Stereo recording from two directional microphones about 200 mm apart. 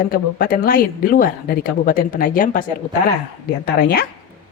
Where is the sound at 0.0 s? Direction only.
45° left (ahead or behind).